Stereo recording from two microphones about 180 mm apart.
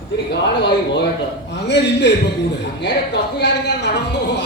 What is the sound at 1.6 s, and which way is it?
Speech, 75° left (ahead or behind).